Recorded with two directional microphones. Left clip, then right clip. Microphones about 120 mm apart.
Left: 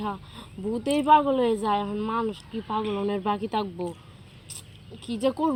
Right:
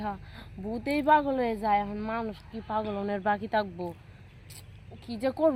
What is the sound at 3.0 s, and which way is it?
Speech, 25° right (ahead or behind).